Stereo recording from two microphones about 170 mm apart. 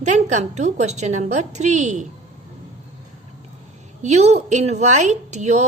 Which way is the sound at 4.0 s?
40° right (ahead or behind).